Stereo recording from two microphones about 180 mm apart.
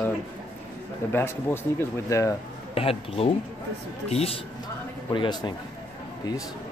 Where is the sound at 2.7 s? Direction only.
35° left (ahead or behind).